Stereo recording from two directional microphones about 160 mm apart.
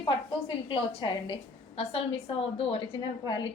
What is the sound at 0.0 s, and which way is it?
A woman's voice, 30° left (ahead or behind).